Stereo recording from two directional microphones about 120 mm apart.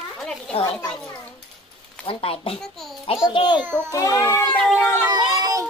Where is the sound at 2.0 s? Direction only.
50° left (ahead or behind).